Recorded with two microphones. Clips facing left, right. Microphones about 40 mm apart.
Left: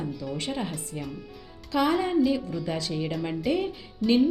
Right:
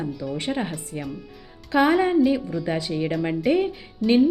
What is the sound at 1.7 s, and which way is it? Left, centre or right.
Speech, right.